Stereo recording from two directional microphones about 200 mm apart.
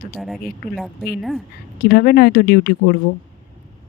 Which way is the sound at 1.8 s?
50° left (ahead or behind).